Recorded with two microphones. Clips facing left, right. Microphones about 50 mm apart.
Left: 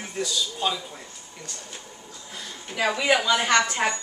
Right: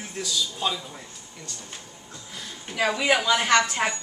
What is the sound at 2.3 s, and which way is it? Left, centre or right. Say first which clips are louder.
A woman's voice: even; centre.